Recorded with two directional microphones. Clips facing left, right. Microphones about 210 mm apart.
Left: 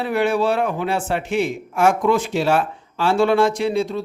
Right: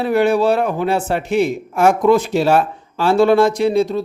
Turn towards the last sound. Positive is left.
turn(degrees=-40)  # may be behind; listen again after turning